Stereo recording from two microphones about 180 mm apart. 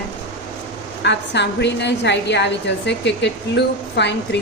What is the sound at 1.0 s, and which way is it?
A woman's voice, 75° left (ahead or behind).